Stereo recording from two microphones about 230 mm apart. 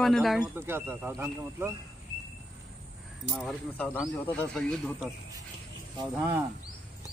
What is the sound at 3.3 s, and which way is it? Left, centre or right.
Speech, centre.